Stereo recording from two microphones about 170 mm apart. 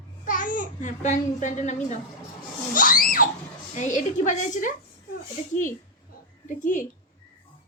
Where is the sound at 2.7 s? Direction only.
55° left (ahead or behind).